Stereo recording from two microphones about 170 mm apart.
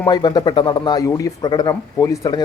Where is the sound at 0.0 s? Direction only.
25° left (ahead or behind).